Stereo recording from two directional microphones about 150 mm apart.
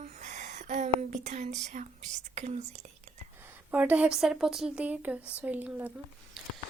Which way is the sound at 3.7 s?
10° right (ahead or behind).